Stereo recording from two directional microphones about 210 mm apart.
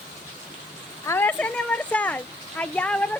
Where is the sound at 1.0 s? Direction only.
10° left (ahead or behind).